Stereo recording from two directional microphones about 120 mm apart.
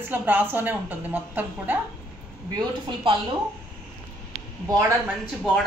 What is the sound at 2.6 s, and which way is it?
Speech, 40° right (ahead or behind).